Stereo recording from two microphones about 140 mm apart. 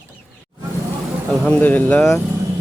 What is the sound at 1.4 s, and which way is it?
Speech, 10° left (ahead or behind).